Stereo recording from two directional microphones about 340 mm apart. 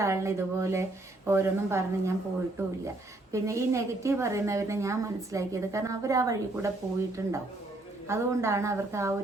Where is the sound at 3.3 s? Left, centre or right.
Centre.